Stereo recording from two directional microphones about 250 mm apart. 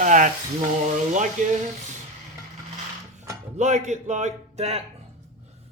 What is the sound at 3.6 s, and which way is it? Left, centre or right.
Speech, right.